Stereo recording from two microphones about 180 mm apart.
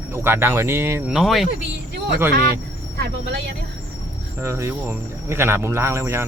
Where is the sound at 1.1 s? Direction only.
Centre (ahead or behind).